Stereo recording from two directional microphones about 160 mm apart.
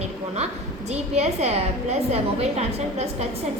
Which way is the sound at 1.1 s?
45° right (ahead or behind).